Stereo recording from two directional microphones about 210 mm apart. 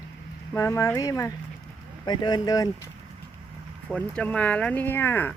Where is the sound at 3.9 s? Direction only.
5° left (ahead or behind).